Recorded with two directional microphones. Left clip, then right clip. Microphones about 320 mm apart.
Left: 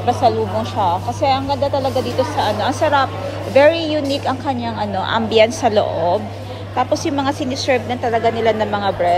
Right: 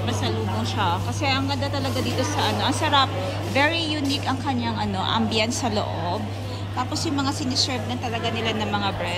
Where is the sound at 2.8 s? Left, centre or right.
Centre.